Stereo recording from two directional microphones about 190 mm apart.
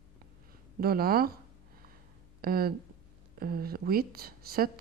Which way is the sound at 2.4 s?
50° right (ahead or behind).